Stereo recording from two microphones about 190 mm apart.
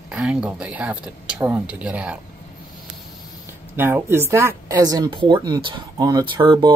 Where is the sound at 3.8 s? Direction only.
10° right (ahead or behind).